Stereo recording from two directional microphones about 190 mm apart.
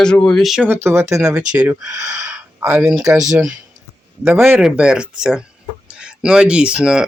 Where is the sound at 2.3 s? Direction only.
5° right (ahead or behind).